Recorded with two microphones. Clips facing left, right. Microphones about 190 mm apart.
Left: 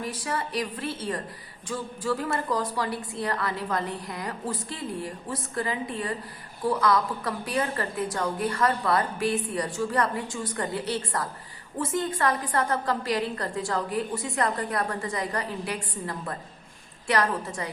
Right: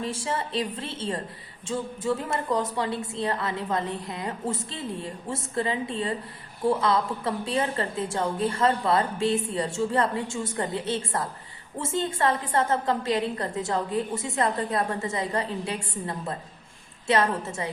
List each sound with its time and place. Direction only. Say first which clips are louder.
0.0 s a woman's voice: right 2 dB; 25° right (ahead or behind)